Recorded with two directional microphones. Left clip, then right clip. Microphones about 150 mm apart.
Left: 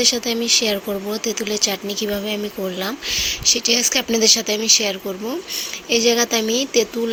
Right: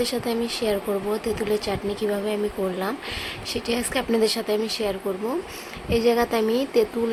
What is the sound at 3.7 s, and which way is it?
Speech, 35° left (ahead or behind).